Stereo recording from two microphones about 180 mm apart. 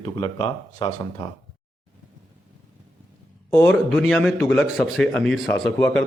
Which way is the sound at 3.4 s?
10° left (ahead or behind).